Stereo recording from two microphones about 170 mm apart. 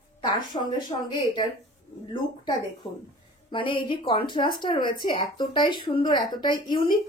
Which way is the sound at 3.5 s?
30° left (ahead or behind).